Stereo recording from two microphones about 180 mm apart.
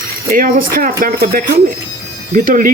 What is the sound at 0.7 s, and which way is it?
Speech, 50° right (ahead or behind).